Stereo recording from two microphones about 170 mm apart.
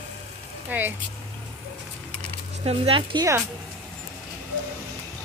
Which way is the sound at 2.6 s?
35° right (ahead or behind).